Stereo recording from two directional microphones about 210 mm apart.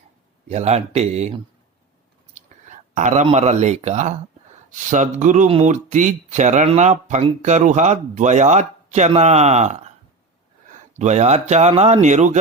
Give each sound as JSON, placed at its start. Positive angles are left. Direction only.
{"t": 0.4, "sound": "speech", "side_deg": -30}
{"t": 2.3, "sound": "speech", "side_deg": -35}
{"t": 10.9, "sound": "speech", "side_deg": -35}